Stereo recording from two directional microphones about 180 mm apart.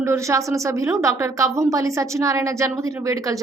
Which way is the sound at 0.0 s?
15° right (ahead or behind).